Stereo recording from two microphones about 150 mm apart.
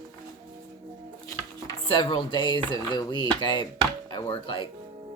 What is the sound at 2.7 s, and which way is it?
Speech, 30° left (ahead or behind).